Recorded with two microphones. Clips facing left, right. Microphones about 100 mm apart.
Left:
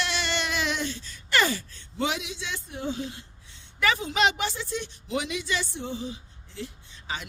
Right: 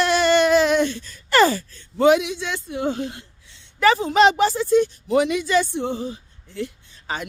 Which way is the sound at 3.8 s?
40° right (ahead or behind).